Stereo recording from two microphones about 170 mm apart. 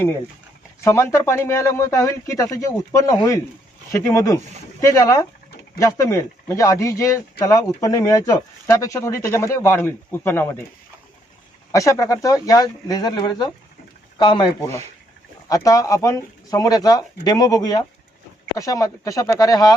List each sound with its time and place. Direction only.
0.9 s speech: 15° left (ahead or behind)
11.7 s speech: 20° left (ahead or behind)